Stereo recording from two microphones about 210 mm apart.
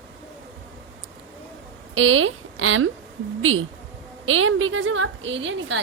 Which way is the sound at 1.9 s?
70° right (ahead or behind).